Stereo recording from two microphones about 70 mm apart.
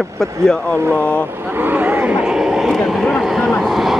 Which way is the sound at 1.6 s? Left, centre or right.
Right.